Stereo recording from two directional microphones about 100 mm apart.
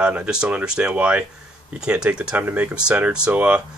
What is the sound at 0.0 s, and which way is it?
Speech, 10° right (ahead or behind).